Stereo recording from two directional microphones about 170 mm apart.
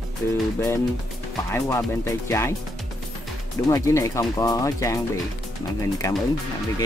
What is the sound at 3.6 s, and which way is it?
Speech, 20° left (ahead or behind).